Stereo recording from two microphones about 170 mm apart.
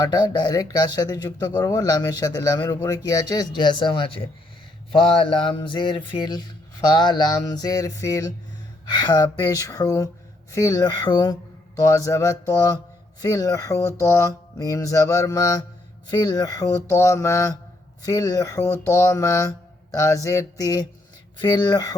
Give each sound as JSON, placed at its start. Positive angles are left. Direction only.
{"t": 0.1, "sound": "a man's voice", "side_deg": 25}